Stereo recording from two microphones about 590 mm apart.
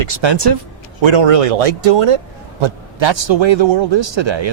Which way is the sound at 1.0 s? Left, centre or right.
Right.